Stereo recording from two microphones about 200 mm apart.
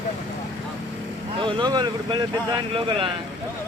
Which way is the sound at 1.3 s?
25° right (ahead or behind).